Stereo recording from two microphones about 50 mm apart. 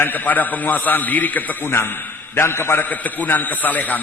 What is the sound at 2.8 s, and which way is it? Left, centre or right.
A man's voice, left.